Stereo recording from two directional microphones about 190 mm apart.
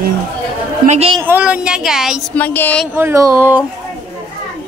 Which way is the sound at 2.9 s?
15° right (ahead or behind).